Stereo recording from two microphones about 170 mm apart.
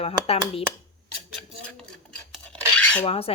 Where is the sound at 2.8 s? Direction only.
10° left (ahead or behind).